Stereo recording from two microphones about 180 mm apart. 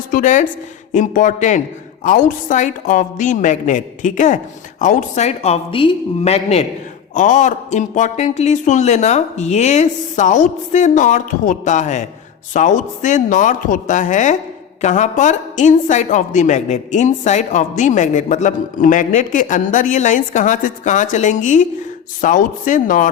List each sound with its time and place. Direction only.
0.1 s a woman's voice: 45° left (ahead or behind)